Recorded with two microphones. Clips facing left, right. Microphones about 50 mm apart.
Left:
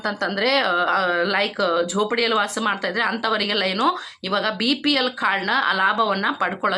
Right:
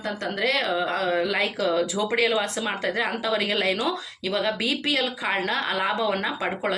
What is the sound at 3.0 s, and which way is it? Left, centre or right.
Speech, left.